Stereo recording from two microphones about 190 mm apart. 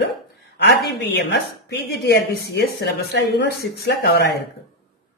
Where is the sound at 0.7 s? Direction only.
65° left (ahead or behind).